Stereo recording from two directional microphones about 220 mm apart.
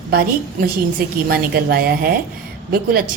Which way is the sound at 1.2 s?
45° right (ahead or behind).